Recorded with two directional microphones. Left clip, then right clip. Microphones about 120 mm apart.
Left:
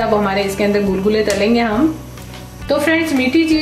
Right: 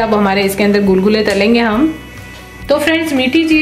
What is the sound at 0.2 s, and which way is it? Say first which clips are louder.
A woman's voice: right 4 dB; 35° right (ahead or behind).